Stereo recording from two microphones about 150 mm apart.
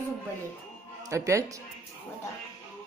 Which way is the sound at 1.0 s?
20° right (ahead or behind).